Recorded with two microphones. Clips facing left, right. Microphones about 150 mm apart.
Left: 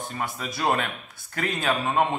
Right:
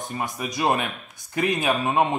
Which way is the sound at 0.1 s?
15° right (ahead or behind).